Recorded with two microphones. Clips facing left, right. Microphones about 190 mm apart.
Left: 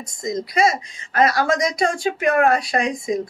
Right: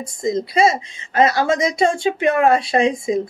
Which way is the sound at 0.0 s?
30° right (ahead or behind).